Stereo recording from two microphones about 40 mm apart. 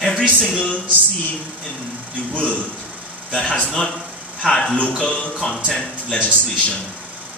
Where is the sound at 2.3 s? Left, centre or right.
Left.